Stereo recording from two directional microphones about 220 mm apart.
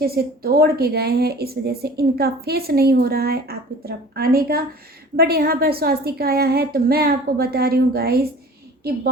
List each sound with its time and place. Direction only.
0.0 s a woman's voice: 45° right (ahead or behind)